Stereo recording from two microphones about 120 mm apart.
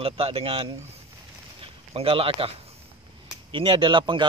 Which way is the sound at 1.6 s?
50° right (ahead or behind).